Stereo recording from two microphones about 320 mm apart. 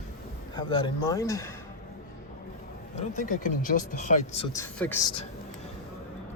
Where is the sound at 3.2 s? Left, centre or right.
Left.